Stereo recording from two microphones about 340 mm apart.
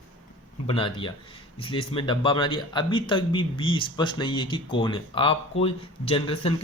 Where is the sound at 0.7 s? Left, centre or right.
Centre.